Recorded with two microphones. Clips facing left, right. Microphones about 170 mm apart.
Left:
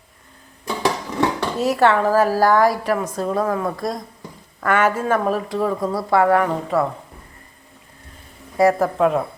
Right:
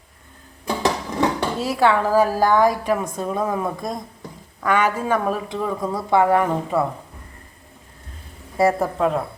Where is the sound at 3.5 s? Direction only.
15° right (ahead or behind).